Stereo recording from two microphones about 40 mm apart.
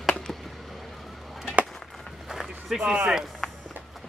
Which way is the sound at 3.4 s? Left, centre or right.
Centre.